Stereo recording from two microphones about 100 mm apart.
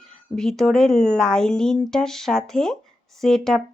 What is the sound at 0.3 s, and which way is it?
Speech, 5° left (ahead or behind).